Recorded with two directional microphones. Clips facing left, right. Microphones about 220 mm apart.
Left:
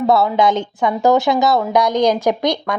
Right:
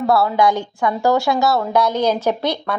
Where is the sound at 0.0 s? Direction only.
20° left (ahead or behind).